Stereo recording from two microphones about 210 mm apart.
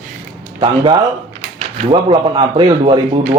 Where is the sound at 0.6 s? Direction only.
25° right (ahead or behind).